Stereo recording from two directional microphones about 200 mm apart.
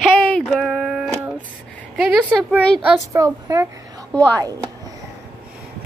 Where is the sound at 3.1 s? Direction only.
15° right (ahead or behind).